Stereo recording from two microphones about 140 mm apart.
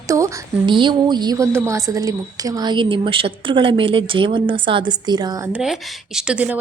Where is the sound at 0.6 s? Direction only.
35° right (ahead or behind).